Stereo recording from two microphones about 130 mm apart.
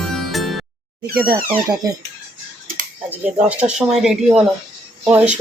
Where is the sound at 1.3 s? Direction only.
30° right (ahead or behind).